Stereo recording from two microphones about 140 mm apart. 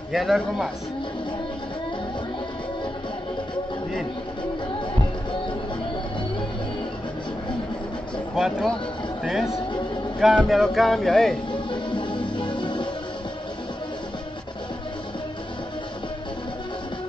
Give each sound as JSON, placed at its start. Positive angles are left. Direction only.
{"t": 0.1, "sound": "speech", "side_deg": 0}
{"t": 8.4, "sound": "speech", "side_deg": 0}
{"t": 11.5, "sound": "music", "side_deg": 35}